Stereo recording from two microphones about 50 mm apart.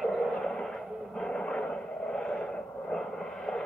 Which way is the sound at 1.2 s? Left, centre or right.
Centre.